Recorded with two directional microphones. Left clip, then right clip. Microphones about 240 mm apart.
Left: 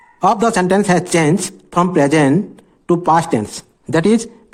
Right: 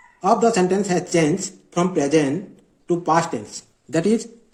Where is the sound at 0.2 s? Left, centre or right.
Left.